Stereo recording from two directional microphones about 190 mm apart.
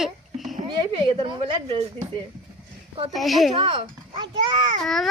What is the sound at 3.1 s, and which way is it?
Speech, centre (ahead or behind).